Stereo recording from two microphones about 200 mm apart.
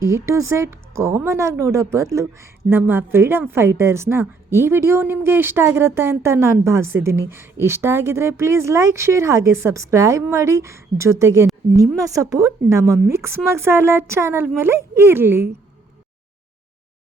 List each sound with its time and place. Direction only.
0.0 s a woman's voice: 15° right (ahead or behind)